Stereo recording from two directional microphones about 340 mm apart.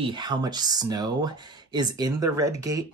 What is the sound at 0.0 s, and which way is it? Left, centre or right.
Speech, centre.